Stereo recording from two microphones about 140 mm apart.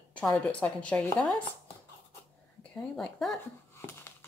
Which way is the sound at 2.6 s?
5° left (ahead or behind).